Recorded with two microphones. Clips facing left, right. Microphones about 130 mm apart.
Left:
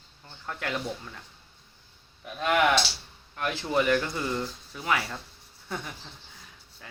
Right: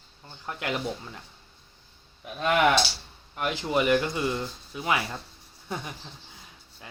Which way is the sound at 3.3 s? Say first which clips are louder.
Right 1 dB; 20° right (ahead or behind).